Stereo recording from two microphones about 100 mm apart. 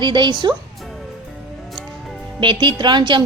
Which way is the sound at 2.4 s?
55° right (ahead or behind).